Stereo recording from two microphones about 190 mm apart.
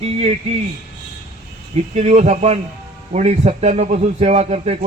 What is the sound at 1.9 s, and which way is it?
A man's voice, 35° right (ahead or behind).